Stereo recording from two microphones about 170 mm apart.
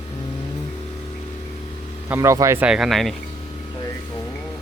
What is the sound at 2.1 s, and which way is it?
Speech, 15° right (ahead or behind).